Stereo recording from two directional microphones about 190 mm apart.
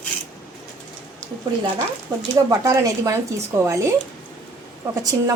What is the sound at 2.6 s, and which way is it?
A woman's voice, 15° right (ahead or behind).